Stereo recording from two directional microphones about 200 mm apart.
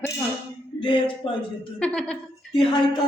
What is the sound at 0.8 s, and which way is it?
Speech, 25° left (ahead or behind).